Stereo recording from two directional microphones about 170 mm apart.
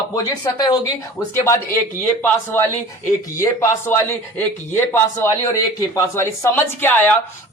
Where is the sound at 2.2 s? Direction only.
15° left (ahead or behind).